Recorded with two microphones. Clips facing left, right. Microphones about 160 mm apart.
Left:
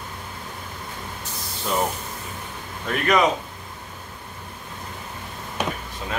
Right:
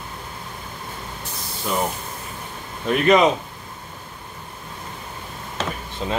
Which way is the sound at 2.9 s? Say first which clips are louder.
Right 4 dB; 20° right (ahead or behind).